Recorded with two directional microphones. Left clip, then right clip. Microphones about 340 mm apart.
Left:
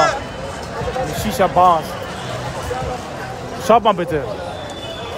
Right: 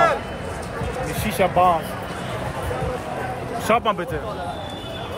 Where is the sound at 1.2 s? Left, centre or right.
Centre.